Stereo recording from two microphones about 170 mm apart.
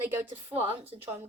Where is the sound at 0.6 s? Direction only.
35° right (ahead or behind).